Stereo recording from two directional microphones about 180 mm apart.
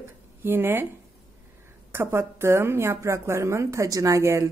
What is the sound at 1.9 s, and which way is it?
A woman's voice, 15° right (ahead or behind).